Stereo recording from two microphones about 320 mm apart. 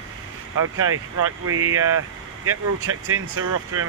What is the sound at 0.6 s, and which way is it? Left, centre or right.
Speech, right.